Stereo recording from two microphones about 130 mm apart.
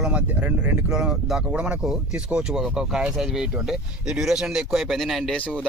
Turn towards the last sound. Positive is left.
turn(degrees=10)  # may be behind; listen again after turning